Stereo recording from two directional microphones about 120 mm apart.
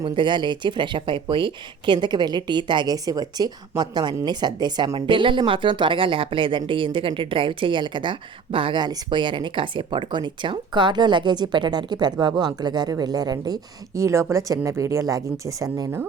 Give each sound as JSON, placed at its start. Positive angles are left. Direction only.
{"t": 0.0, "sound": "speech", "side_deg": -40}